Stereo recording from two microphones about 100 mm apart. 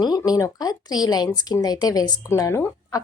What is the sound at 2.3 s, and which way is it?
Speech, 30° left (ahead or behind).